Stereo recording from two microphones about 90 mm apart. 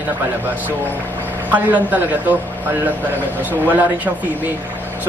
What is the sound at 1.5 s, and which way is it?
Speech, 20° right (ahead or behind).